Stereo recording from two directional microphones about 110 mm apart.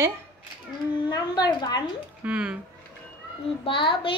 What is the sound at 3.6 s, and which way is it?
Speech, 50° left (ahead or behind).